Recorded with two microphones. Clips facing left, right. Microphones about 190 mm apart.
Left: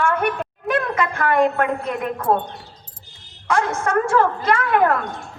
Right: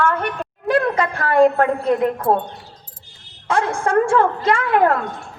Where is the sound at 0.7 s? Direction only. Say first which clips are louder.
Right 4 dB; 30° right (ahead or behind).